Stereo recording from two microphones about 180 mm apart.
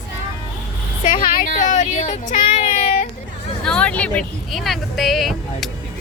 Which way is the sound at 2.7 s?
50° left (ahead or behind).